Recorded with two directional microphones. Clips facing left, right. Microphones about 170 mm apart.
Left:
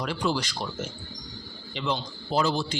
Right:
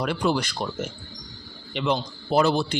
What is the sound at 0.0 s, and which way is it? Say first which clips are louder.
Speech: right 4 dB; 60° right (ahead or behind).